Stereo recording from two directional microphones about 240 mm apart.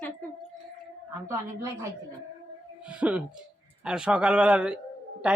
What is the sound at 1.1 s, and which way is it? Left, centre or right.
A man's voice, centre.